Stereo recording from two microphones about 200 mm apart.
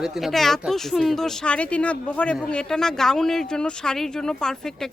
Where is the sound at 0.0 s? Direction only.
Centre (ahead or behind).